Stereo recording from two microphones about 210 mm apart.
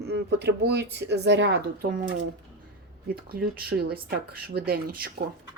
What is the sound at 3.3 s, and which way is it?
Speech, 45° right (ahead or behind).